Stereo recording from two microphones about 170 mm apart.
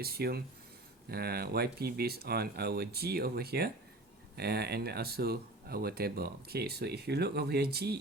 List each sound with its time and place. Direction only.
0.0 s speech: 65° right (ahead or behind)